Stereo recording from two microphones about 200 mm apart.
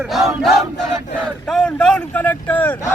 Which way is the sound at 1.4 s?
5° left (ahead or behind).